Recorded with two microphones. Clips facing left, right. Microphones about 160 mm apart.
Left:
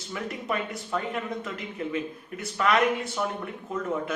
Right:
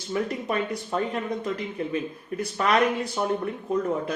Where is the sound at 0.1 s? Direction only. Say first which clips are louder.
Right 4 dB; 30° right (ahead or behind).